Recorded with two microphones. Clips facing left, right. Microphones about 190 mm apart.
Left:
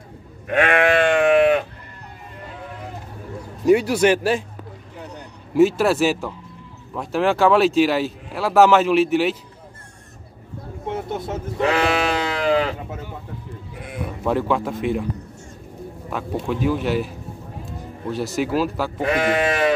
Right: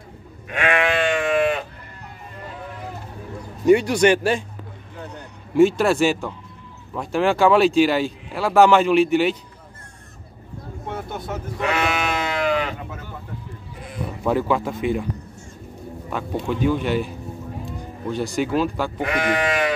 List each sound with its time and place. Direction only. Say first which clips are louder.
0.5 s sheep: left 4 dB; 50° left (ahead or behind)
3.6 s speech: even; 5° left (ahead or behind)
5.5 s speech: even; 5° left (ahead or behind)
10.9 s sheep: left 4 dB; 25° left (ahead or behind)
14.2 s speech: even; centre (ahead or behind)
16.1 s speech: even; centre (ahead or behind)
18.9 s speech: left 4 dB; 25° left (ahead or behind)